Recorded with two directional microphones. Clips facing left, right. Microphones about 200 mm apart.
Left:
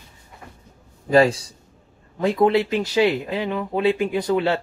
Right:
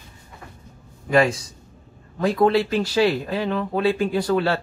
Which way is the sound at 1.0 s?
30° left (ahead or behind).